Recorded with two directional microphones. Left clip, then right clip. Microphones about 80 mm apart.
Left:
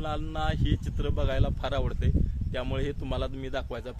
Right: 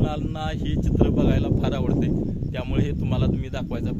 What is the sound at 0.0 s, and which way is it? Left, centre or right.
Speech, right.